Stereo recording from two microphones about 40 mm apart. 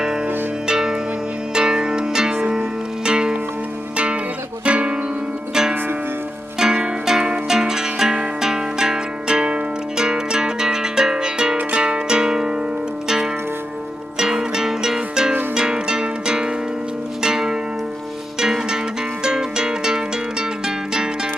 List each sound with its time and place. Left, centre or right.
0.7 s music: centre; by 4.9 s right
6.6 s zither: centre
11.7 s music: right
19.2 s music: centre